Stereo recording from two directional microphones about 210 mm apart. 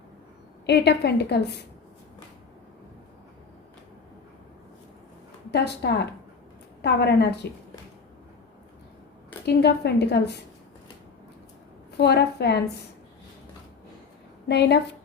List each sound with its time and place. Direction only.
0.6 s a woman's voice: 50° left (ahead or behind)
5.5 s a woman's voice: 50° left (ahead or behind)
9.5 s a woman's voice: 50° left (ahead or behind)
11.9 s a woman's voice: 50° left (ahead or behind)
14.4 s a woman's voice: 50° left (ahead or behind)